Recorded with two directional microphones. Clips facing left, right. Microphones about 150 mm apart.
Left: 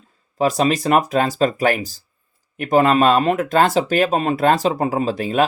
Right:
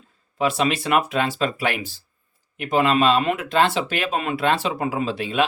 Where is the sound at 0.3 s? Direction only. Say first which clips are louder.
Left 4 dB; 40° left (ahead or behind).